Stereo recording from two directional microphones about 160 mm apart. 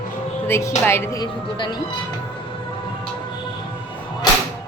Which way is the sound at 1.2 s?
30° left (ahead or behind).